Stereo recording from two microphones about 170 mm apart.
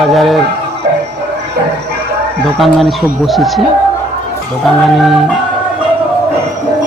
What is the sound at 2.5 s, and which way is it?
Speech, centre (ahead or behind).